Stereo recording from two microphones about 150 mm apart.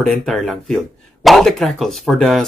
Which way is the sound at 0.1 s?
Centre (ahead or behind).